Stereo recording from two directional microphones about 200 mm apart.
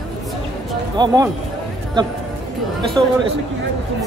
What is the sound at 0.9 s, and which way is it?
Speech, 20° right (ahead or behind).